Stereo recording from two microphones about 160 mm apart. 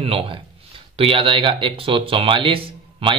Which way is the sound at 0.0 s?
35° right (ahead or behind).